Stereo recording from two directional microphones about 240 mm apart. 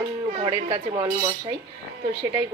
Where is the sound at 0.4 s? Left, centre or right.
Right.